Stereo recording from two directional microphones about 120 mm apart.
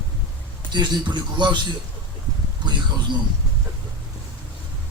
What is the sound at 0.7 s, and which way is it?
Speech, 40° right (ahead or behind).